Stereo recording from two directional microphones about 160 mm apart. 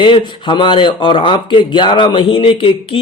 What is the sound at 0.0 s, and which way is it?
Speech, 30° left (ahead or behind).